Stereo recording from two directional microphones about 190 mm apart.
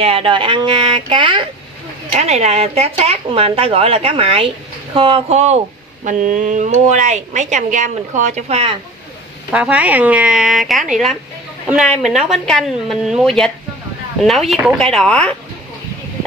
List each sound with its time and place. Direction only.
0.0 s a woman's voice: 30° right (ahead or behind)
9.5 s speech: 5° right (ahead or behind)